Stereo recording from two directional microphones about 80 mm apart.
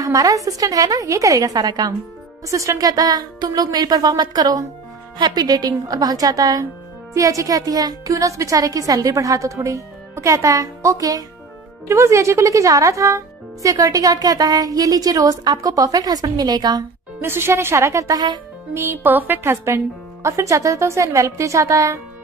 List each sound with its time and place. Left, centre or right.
0.0 s a woman's voice: right
2.5 s speech: right
11.9 s speech: right
17.2 s a woman's voice: right
18.7 s speech: right
20.2 s a woman's voice: right